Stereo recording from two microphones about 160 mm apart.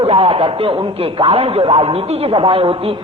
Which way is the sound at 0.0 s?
35° right (ahead or behind).